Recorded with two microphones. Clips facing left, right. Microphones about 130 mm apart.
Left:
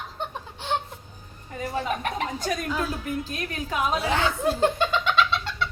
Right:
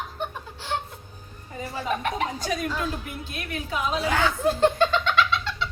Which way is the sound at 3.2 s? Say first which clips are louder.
Left 2 dB; 35° left (ahead or behind).